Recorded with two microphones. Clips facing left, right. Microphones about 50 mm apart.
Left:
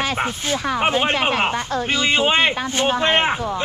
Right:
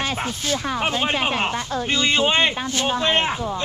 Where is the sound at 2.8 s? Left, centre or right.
Left.